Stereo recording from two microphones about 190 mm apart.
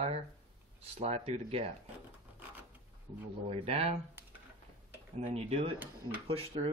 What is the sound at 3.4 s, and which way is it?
Speech, 30° right (ahead or behind).